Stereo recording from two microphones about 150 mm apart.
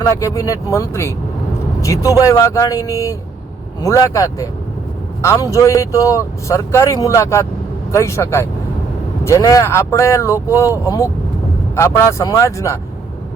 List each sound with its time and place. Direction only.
0.0 s speech: 20° left (ahead or behind)